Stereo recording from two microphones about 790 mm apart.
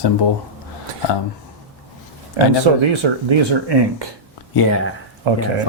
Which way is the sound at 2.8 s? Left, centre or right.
Right.